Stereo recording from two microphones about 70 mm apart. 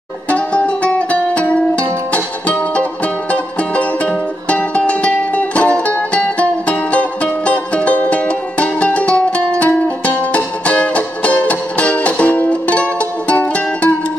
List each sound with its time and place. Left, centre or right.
0.3 s music: centre